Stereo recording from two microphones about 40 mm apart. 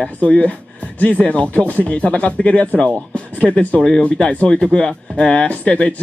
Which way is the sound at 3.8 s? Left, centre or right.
Centre.